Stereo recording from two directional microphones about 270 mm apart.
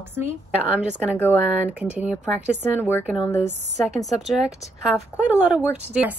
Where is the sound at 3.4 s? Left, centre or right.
Right.